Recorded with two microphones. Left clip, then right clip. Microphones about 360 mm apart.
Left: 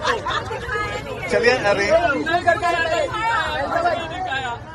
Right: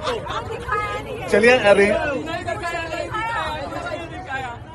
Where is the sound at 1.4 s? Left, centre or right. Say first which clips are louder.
Right 4 dB; centre.